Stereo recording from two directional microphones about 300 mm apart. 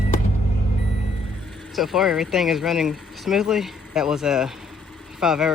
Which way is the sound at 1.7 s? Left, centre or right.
Centre.